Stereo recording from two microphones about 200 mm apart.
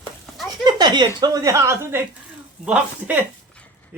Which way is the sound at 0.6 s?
20° right (ahead or behind).